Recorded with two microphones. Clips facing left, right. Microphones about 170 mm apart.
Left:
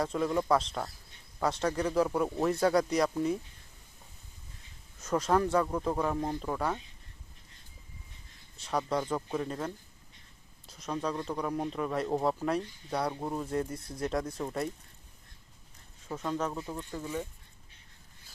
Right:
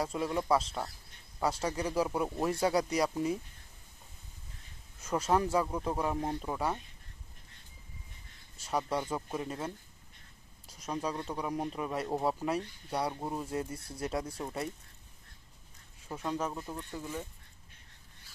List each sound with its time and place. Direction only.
0.0 s speech: 10° right (ahead or behind)
5.0 s speech: 10° right (ahead or behind)
8.5 s speech: 10° right (ahead or behind)
16.0 s speech: 10° right (ahead or behind)